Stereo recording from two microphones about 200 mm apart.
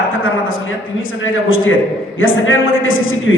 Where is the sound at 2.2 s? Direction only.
80° left.